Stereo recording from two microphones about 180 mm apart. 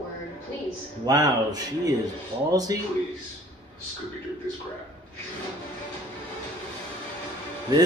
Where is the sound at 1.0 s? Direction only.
20° right (ahead or behind).